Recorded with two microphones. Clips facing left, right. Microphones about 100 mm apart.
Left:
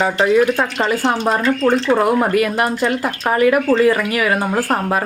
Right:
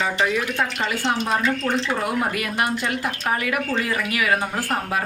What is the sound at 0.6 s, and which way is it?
Speech, 35° left (ahead or behind).